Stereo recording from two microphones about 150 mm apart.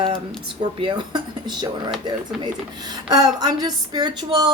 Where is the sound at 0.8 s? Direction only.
35° right (ahead or behind).